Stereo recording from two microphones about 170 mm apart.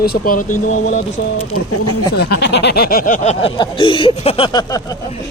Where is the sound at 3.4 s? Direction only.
30° left (ahead or behind).